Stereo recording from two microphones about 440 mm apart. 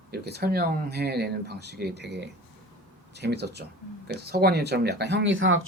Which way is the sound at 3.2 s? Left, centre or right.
Right.